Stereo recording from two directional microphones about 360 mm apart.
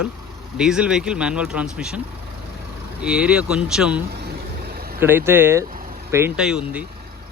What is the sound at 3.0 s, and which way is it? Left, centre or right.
Speech, centre.